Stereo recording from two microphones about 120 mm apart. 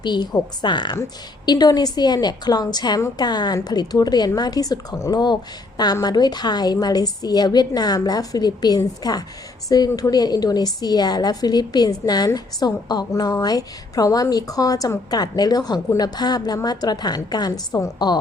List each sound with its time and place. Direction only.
0.0 s a woman's voice: 35° left (ahead or behind)